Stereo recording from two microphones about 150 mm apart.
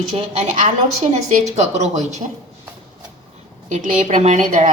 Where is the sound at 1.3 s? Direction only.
50° right (ahead or behind).